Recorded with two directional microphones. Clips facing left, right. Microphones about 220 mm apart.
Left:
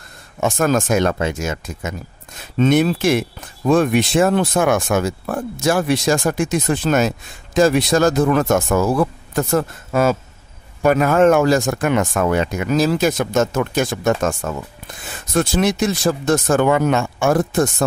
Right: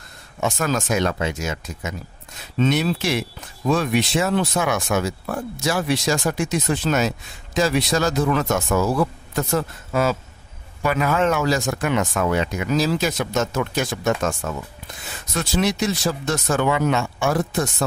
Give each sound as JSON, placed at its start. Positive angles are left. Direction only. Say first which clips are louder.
{"t": 0.4, "sound": "speech", "louder": "left 5 dB", "side_deg": 50}